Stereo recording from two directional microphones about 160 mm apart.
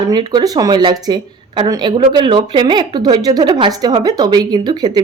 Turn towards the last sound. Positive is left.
turn(degrees=-25)  # may be behind; listen again after turning